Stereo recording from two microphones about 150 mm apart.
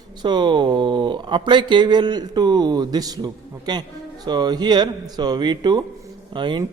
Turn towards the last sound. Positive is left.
turn(degrees=-30)  # may be behind; listen again after turning